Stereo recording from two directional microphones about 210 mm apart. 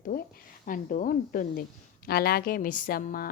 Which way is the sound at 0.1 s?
45° left (ahead or behind).